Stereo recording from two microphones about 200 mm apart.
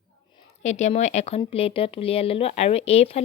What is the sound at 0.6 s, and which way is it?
Speech, 35° left (ahead or behind).